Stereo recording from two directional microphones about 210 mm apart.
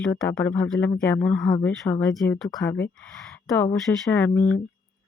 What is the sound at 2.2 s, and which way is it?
Speech, 5° left (ahead or behind).